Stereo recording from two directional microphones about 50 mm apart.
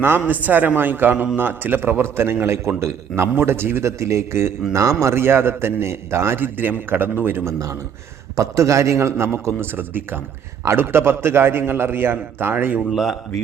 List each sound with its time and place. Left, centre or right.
0.3 s a man's voice: right
0.8 s a man's voice: right
2.5 s a man's voice: right
3.8 s a man's voice: right
4.7 s a man's voice: right
5.1 s a man's voice: right
6.4 s a man's voice: right
8.4 s a man's voice: right
12.9 s a man's voice: centre